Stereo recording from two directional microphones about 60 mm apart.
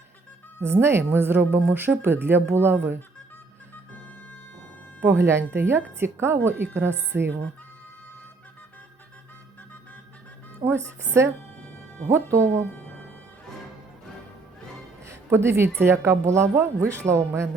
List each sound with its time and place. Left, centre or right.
0.6 s speech: right
5.0 s speech: right
7.1 s speech: right
10.7 s speech: right
11.6 s music: left
12.1 s speech: right
15.0 s music: right
15.8 s speech: right